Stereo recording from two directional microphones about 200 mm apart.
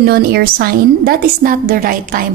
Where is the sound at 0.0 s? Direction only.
50° right (ahead or behind).